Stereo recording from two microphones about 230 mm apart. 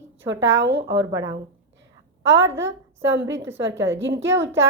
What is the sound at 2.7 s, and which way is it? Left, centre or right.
Speech, right.